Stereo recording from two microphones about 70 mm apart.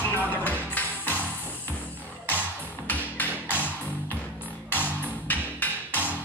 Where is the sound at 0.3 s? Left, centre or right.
Left.